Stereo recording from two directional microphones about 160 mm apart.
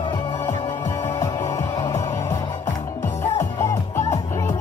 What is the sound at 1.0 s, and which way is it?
Music, 15° left (ahead or behind).